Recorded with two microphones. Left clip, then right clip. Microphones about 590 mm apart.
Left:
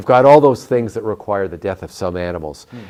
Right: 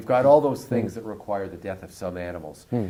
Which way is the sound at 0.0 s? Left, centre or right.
Left.